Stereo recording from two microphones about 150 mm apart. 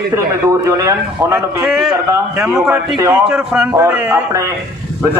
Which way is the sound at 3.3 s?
5° right (ahead or behind).